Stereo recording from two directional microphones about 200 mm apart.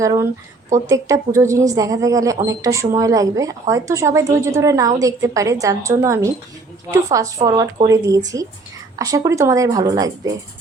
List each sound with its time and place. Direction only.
0.0 s a woman's voice: 15° right (ahead or behind)